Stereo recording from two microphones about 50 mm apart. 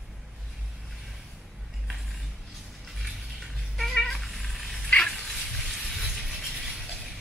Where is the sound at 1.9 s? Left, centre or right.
Centre.